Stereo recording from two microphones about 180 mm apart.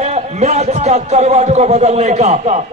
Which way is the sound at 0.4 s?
40° right (ahead or behind).